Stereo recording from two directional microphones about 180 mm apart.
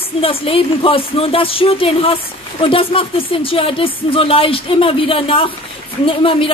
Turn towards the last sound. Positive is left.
turn(degrees=30)  # may be behind; listen again after turning